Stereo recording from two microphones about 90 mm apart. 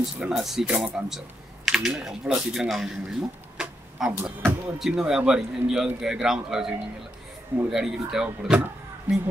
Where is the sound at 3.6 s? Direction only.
10° right (ahead or behind).